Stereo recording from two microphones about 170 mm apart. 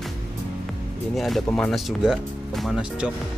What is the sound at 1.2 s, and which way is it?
Speech, centre (ahead or behind).